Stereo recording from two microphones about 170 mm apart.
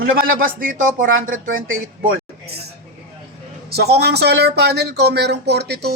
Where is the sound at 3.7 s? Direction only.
75° right (ahead or behind).